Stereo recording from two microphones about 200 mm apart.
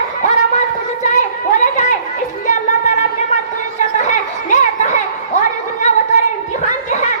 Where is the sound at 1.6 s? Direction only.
35° left (ahead or behind).